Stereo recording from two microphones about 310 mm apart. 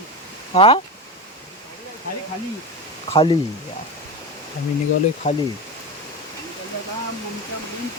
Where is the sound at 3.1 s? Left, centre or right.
Centre.